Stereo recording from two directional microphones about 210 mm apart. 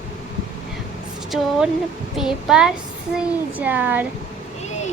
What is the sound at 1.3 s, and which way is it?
A woman's voice, centre (ahead or behind).